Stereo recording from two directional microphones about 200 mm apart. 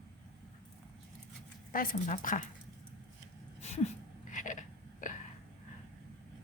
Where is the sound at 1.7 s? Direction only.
45° left (ahead or behind).